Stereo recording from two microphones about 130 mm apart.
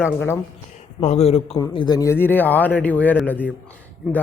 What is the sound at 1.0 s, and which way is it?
Speech, 55° left (ahead or behind).